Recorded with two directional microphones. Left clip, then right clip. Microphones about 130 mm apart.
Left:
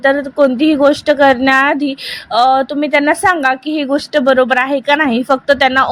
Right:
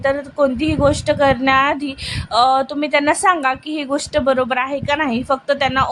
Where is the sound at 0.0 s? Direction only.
30° left (ahead or behind).